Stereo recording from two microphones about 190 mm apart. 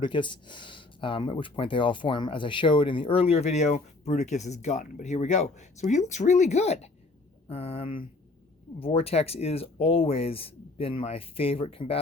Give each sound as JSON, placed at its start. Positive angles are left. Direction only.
{"t": 0.0, "sound": "speech", "side_deg": 25}